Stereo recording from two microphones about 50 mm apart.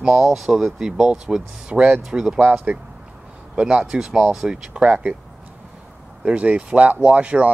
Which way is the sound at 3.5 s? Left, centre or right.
Right.